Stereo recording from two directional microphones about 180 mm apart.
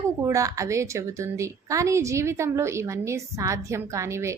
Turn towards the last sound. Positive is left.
turn(degrees=-15)  # may be behind; listen again after turning